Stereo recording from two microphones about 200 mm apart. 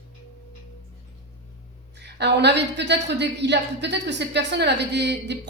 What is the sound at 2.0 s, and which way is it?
A woman's voice, 55° right (ahead or behind).